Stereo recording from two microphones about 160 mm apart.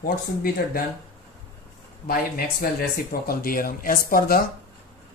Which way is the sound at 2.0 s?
65° left (ahead or behind).